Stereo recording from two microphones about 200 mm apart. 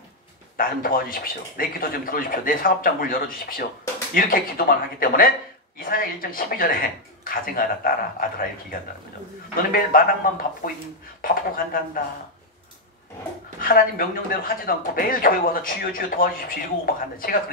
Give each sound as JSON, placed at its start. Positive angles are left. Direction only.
{"t": 0.6, "sound": "speech", "side_deg": 45}
{"t": 13.6, "sound": "speech", "side_deg": 45}